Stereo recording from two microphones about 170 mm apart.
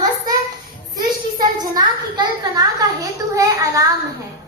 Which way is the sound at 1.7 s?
20° right (ahead or behind).